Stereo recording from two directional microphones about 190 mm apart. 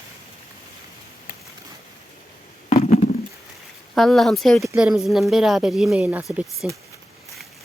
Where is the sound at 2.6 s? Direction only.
35° left (ahead or behind).